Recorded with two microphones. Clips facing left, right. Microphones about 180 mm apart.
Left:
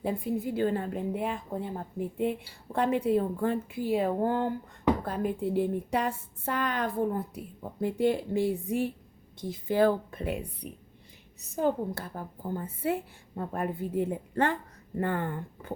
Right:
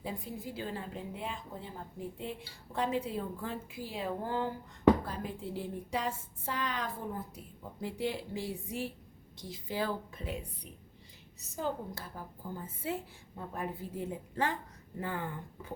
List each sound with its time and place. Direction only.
0.0 s a woman's voice: 60° left (ahead or behind)
11.5 s a woman's voice: 60° left (ahead or behind)